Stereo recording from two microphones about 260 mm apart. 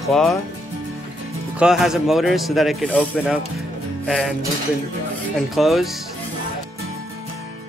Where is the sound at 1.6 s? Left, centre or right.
Centre.